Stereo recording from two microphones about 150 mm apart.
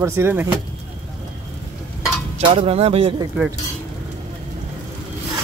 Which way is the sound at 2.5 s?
40° right (ahead or behind).